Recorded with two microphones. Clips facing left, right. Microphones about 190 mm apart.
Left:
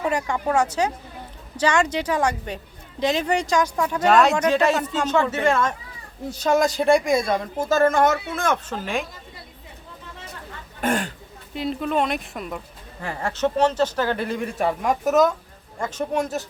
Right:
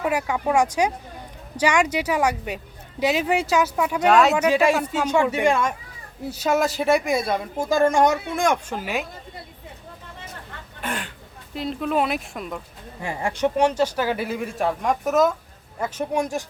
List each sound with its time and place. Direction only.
0.0 s speech: 10° right (ahead or behind)
10.8 s speech: 45° left (ahead or behind)
11.5 s speech: centre (ahead or behind)
13.0 s speech: 15° right (ahead or behind)